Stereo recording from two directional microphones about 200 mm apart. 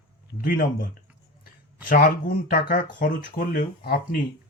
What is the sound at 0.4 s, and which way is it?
Speech, 45° left (ahead or behind).